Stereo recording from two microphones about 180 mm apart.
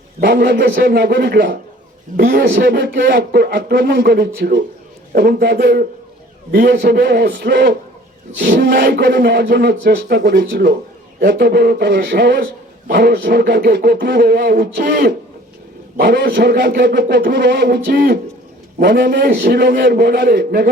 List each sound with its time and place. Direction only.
0.2 s a man's voice: 70° right (ahead or behind)